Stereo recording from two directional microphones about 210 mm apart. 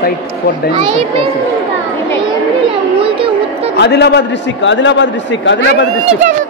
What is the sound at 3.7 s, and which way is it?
A man's voice, 55° left (ahead or behind).